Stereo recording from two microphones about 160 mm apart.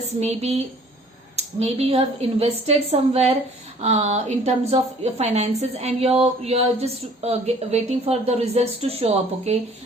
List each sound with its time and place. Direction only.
0.2 s a woman's voice: 40° right (ahead or behind)